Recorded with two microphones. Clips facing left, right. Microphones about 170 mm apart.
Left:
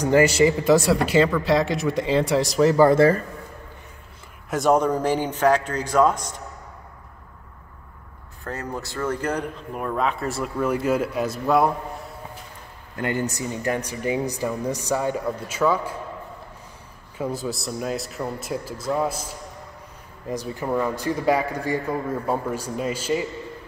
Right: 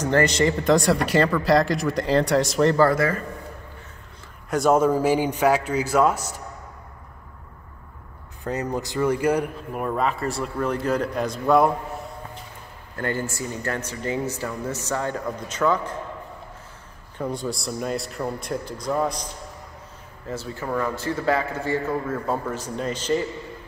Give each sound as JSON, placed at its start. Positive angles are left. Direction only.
{"t": 0.0, "sound": "speech", "side_deg": 10}
{"t": 2.8, "sound": "speech", "side_deg": 25}
{"t": 4.5, "sound": "speech", "side_deg": 0}
{"t": 8.5, "sound": "speech", "side_deg": -15}
{"t": 12.9, "sound": "speech", "side_deg": 15}
{"t": 17.2, "sound": "speech", "side_deg": 5}